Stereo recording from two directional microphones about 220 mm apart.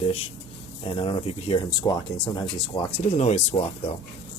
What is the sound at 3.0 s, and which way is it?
Speech, 30° left (ahead or behind).